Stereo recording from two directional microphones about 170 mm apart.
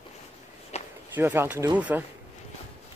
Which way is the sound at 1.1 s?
10° right (ahead or behind).